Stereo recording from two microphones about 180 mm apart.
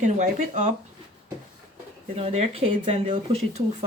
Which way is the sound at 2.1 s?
35° right (ahead or behind).